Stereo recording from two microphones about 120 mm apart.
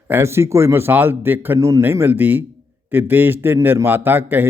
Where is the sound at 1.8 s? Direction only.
20° right (ahead or behind).